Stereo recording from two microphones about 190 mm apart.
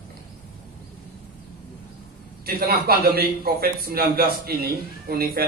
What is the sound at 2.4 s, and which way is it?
A man's voice, 50° right (ahead or behind).